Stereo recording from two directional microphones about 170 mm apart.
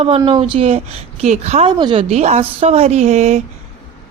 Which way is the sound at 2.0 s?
40° right (ahead or behind).